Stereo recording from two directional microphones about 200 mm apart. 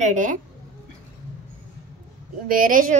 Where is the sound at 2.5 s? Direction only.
45° right (ahead or behind).